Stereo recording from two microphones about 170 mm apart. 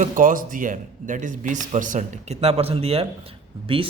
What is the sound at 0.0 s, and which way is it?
A man's voice, 50° right (ahead or behind).